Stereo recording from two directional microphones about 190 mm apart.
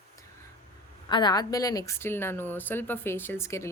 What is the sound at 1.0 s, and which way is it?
Speech, 25° left (ahead or behind).